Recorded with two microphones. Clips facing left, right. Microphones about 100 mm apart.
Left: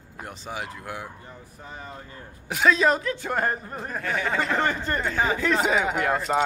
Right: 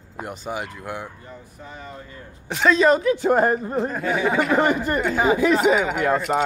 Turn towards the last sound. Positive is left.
turn(degrees=0)  # may be behind; listen again after turning